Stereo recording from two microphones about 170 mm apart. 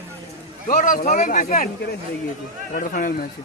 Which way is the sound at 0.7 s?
55° left (ahead or behind).